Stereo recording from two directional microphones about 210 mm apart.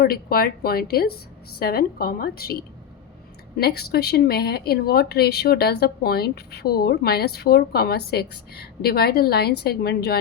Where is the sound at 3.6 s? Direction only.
50° left (ahead or behind).